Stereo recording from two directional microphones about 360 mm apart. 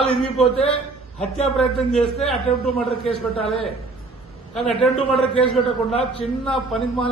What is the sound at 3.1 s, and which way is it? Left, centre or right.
Speech, centre.